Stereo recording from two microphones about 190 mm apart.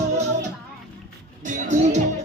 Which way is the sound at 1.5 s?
40° right (ahead or behind).